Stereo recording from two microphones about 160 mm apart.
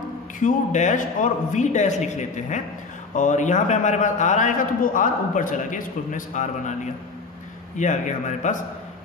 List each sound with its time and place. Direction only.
0.4 s a man's voice: 50° left (ahead or behind)